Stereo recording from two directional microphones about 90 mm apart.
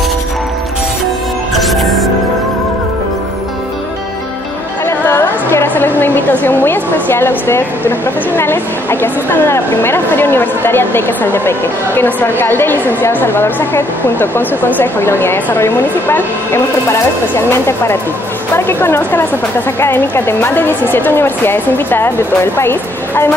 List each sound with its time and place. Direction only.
1.5 s music: centre (ahead or behind)
4.8 s music: 25° left (ahead or behind)
9.0 s a woman's voice: 25° left (ahead or behind)